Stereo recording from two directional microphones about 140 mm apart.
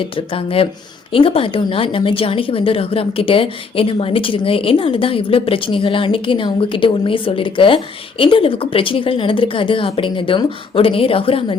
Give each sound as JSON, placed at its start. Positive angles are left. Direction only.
{"t": 0.0, "sound": "a woman's voice", "side_deg": 40}